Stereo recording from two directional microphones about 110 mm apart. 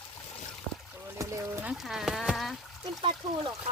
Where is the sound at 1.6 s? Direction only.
5° right (ahead or behind).